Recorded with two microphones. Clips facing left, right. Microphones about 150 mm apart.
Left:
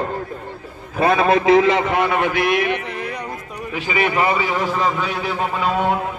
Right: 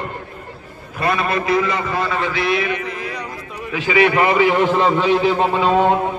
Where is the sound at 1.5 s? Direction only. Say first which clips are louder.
Left 4 dB; 90° left; by 2.5 s 55° left (ahead or behind).